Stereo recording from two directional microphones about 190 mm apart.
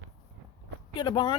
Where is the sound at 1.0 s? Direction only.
25° left (ahead or behind).